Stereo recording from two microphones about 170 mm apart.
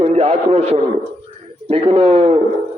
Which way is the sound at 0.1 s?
40° right (ahead or behind).